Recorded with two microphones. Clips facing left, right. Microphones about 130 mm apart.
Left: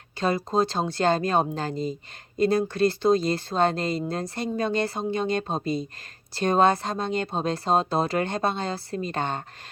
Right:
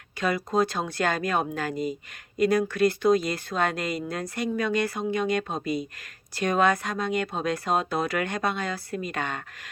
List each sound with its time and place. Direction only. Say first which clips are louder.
0.2 s speech: left 1 dB; 25° left (ahead or behind)